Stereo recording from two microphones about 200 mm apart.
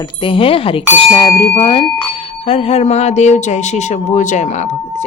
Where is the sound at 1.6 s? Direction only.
25° left (ahead or behind).